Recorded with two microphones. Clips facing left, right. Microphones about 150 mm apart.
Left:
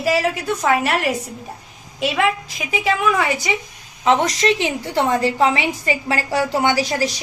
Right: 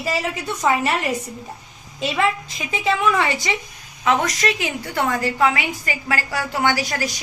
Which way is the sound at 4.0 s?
25° left (ahead or behind).